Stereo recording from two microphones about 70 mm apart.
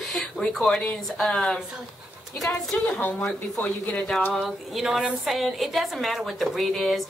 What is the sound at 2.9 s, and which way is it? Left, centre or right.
Speech, left.